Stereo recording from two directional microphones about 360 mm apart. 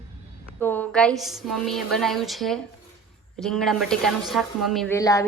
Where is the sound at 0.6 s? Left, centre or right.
Centre.